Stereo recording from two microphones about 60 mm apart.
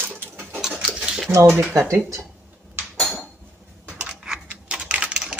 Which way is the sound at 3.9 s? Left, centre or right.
Centre.